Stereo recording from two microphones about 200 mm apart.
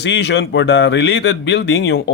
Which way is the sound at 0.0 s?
60° left (ahead or behind).